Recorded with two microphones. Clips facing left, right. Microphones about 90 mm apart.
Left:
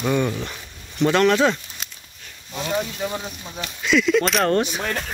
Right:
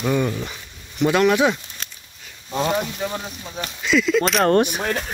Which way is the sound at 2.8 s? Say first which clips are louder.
Even; centre (ahead or behind).